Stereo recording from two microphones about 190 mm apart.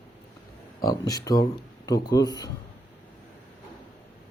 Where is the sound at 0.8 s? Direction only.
20° left (ahead or behind).